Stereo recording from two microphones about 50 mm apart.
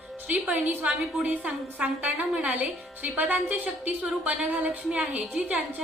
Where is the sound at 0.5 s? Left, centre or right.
Right.